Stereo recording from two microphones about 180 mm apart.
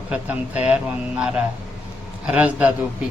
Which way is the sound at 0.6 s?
5° right (ahead or behind).